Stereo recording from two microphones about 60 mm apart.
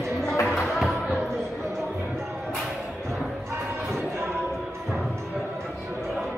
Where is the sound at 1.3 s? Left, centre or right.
Right.